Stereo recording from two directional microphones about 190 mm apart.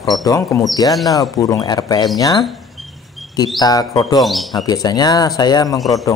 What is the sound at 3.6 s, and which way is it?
Speech, 20° left (ahead or behind).